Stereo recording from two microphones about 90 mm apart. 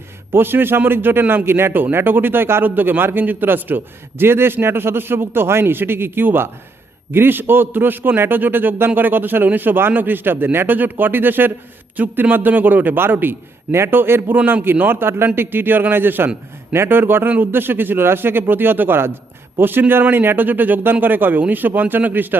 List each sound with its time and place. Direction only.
0.3 s a man's voice: 25° right (ahead or behind)